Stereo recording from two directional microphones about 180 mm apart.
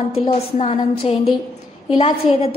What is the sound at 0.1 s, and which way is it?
A woman's voice, 35° left (ahead or behind).